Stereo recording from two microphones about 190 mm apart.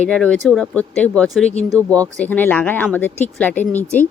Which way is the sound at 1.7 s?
20° right (ahead or behind).